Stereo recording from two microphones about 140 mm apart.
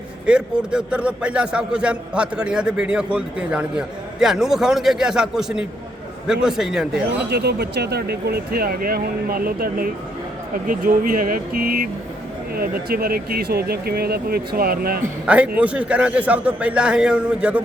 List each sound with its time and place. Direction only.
0.3 s a man's voice: 5° right (ahead or behind)
8.5 s speech: 90° right
15.3 s a man's voice: 10° right (ahead or behind)